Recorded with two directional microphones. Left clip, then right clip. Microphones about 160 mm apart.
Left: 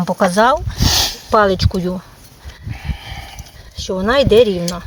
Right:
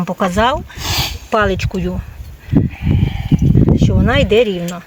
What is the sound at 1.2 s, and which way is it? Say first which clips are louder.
Speech: left 2 dB; 10° left (ahead or behind).